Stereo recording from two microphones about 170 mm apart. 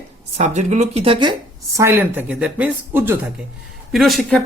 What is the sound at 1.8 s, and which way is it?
Speech, 15° right (ahead or behind).